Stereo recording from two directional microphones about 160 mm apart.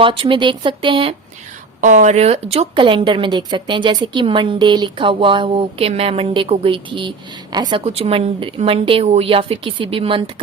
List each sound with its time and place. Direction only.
0.0 s a woman's voice: 35° right (ahead or behind)
1.8 s a woman's voice: 50° right (ahead or behind); by 7.8 s 25° right (ahead or behind)
7.9 s a woman's voice: 35° right (ahead or behind)